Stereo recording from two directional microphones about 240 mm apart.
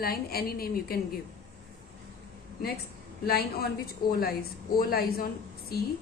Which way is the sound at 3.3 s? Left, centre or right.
Left.